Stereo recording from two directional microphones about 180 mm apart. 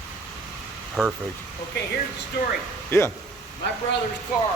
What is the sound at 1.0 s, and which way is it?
Speech, centre (ahead or behind).